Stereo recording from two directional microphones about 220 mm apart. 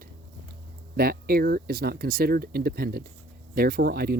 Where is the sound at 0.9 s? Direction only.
40° right (ahead or behind).